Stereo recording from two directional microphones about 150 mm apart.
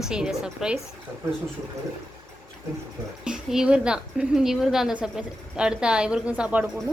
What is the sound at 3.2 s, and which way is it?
A woman's voice, 5° right (ahead or behind).